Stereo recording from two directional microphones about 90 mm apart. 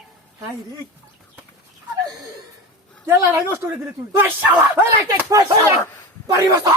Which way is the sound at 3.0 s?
30° right (ahead or behind).